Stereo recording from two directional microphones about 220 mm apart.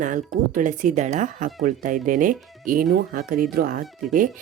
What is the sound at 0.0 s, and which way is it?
Speech, 35° right (ahead or behind).